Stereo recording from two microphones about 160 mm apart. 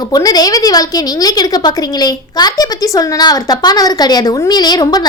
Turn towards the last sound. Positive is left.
turn(degrees=25)  # may be behind; listen again after turning